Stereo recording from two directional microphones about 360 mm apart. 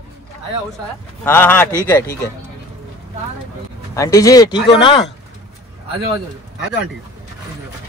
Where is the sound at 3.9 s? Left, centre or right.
Centre.